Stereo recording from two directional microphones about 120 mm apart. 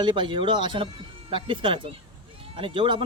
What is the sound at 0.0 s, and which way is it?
A man's voice, 40° right (ahead or behind).